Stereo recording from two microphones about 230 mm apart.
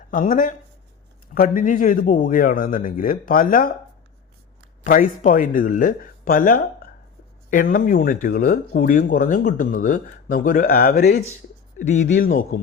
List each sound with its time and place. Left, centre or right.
0.1 s speech: left
4.8 s speech: left